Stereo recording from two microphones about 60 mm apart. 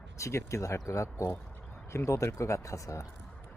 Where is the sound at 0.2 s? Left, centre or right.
Left.